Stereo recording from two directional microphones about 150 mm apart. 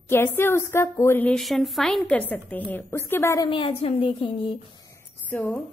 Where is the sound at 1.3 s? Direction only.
Centre (ahead or behind); by 3.4 s 20° left (ahead or behind).